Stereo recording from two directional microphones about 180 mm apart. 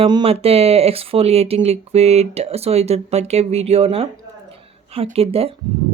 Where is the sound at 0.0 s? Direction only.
30° right (ahead or behind).